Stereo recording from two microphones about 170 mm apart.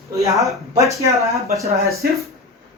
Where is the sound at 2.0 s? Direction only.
65° right (ahead or behind).